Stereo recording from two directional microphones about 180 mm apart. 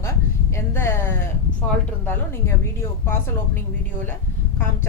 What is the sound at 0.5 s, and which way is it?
Speech, 15° left (ahead or behind).